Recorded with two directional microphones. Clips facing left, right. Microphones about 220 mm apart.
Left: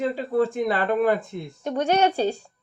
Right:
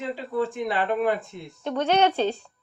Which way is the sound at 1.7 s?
10° left (ahead or behind).